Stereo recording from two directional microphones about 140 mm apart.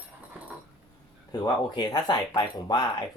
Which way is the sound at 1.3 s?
30° left (ahead or behind).